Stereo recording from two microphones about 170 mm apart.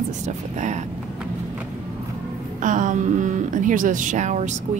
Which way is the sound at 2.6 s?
50° right (ahead or behind).